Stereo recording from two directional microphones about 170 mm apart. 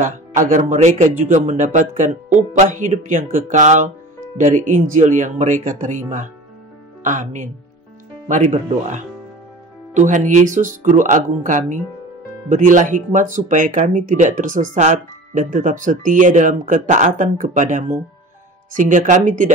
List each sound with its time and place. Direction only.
0.5 s speech: 45° right (ahead or behind)